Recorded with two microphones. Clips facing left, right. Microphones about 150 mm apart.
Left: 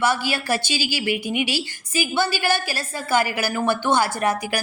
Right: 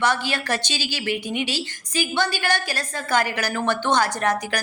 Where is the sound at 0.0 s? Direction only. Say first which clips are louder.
Left 1 dB; 5° left (ahead or behind).